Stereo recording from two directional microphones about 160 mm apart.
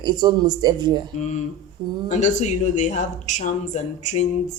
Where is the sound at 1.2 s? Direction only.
45° left (ahead or behind).